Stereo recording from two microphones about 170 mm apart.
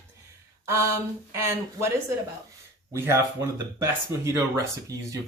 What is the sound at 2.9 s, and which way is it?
Speech, 15° right (ahead or behind).